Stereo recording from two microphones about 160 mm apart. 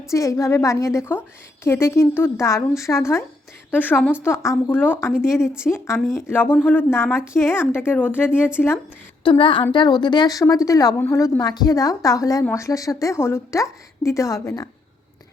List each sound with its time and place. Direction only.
0.1 s a woman's voice: 20° left (ahead or behind)
9.2 s a woman's voice: 30° left (ahead or behind)